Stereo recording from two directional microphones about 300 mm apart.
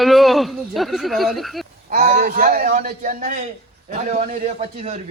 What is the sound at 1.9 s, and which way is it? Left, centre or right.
A man's voice, right.